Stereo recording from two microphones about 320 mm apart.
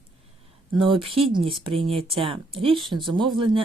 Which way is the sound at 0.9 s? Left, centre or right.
Centre.